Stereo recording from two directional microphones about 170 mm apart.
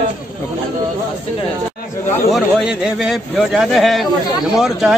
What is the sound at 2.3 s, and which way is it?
A man's voice, 5° right (ahead or behind).